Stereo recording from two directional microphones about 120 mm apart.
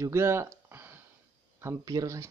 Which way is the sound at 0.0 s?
25° right (ahead or behind).